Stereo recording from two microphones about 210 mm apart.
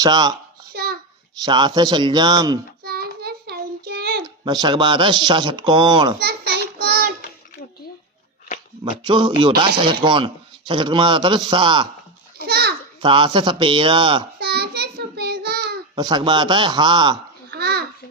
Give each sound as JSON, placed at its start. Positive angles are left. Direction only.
{"t": 0.0, "sound": "a man's voice", "side_deg": -20}
{"t": 0.7, "sound": "child singing", "side_deg": -50}
{"t": 1.5, "sound": "a man's voice", "side_deg": -20}
{"t": 2.8, "sound": "child singing", "side_deg": -50}
{"t": 4.2, "sound": "a man's voice", "side_deg": -20}
{"t": 6.1, "sound": "a sound", "side_deg": -45}
{"t": 8.8, "sound": "a man's voice", "side_deg": -20}
{"t": 12.4, "sound": "a sound", "side_deg": -50}
{"t": 13.0, "sound": "a man's voice", "side_deg": -25}
{"t": 14.3, "sound": "child singing", "side_deg": -50}
{"t": 16.0, "sound": "a man's voice", "side_deg": -20}
{"t": 17.5, "sound": "babbling", "side_deg": -50}